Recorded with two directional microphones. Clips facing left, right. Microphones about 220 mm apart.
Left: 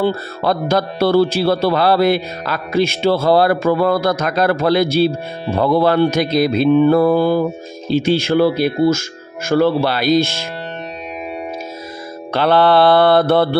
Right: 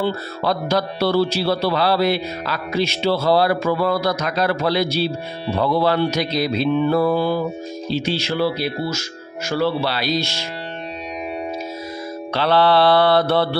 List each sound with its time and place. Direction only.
0.0 s speech: 50° left (ahead or behind)
12.3 s speech: 50° left (ahead or behind)